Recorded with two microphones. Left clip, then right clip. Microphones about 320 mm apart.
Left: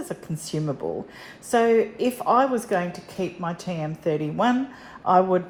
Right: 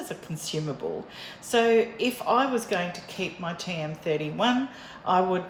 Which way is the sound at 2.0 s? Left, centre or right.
Centre.